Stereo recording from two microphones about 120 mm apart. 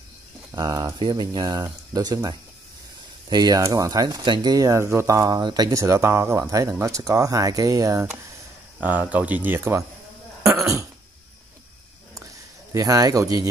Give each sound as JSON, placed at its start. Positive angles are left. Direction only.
{"t": 0.5, "sound": "speech", "side_deg": -30}
{"t": 3.3, "sound": "speech", "side_deg": -35}
{"t": 10.5, "sound": "cough", "side_deg": -25}
{"t": 12.7, "sound": "speech", "side_deg": -30}